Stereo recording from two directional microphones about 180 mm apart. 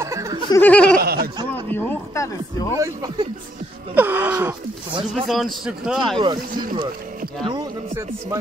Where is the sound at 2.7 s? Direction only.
20° right (ahead or behind).